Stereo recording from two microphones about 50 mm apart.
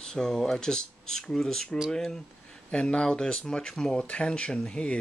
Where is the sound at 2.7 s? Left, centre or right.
Left.